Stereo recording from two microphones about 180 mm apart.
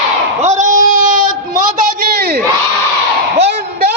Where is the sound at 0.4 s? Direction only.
40° right (ahead or behind); by 2.4 s 60° right (ahead or behind).